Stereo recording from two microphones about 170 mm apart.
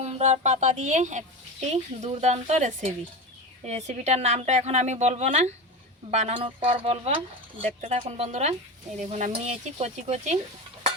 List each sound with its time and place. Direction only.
0.0 s speech: 40° right (ahead or behind)